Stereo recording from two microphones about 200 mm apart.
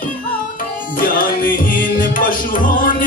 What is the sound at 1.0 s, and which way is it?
Music, 45° left (ahead or behind).